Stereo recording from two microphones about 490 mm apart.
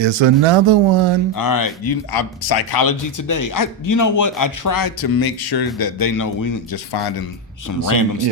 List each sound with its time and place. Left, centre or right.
0.0 s speech: right
1.4 s a man's voice: left
6.9 s speech: left
7.9 s a man's voice: left